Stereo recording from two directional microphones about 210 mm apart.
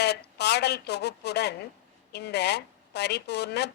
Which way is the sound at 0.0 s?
50° left (ahead or behind).